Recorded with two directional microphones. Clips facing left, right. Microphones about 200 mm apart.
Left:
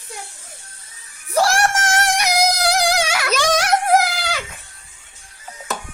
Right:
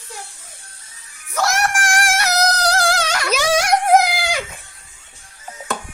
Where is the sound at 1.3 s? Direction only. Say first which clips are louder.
Left 3 dB; 30° left (ahead or behind); by 3.3 s 10° left (ahead or behind).